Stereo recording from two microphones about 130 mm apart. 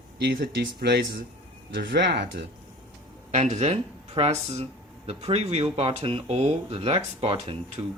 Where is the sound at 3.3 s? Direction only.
60° right (ahead or behind).